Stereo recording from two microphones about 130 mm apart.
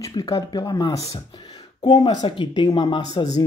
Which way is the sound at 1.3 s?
30° left (ahead or behind).